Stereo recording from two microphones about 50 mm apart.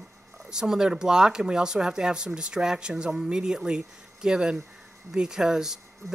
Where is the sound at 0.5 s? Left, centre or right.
Centre.